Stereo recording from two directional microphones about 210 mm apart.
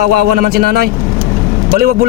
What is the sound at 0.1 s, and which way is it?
Speech, 45° right (ahead or behind).